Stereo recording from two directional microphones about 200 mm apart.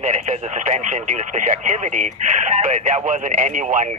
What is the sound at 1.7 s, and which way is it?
Speech, 40° right (ahead or behind).